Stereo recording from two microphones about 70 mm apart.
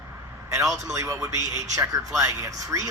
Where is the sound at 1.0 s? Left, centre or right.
Right.